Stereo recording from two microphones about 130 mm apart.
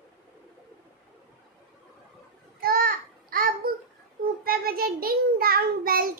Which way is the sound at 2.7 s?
90° right.